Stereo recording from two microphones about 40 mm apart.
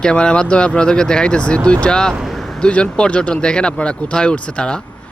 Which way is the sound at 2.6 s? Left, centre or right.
Left.